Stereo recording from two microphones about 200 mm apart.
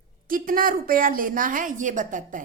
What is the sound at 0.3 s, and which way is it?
A woman's voice, 45° right (ahead or behind).